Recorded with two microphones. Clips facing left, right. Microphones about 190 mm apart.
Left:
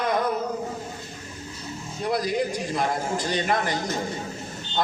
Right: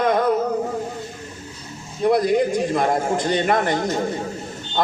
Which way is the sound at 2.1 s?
55° right (ahead or behind).